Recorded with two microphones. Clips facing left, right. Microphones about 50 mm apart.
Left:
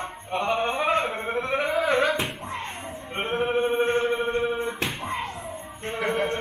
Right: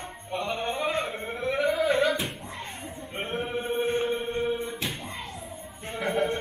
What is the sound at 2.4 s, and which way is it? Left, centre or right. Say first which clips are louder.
Music: left 5 dB; left.